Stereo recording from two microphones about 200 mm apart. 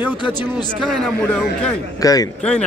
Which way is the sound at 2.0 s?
20° left (ahead or behind).